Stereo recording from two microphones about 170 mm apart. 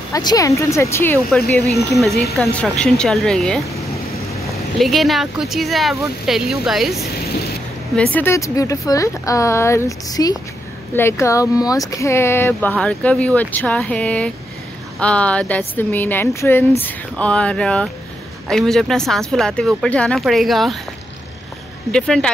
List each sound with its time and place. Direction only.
0.1 s speech: 20° left (ahead or behind); by 3.6 s 5° left (ahead or behind)
4.7 s speech: centre (ahead or behind)
21.9 s speech: 5° left (ahead or behind)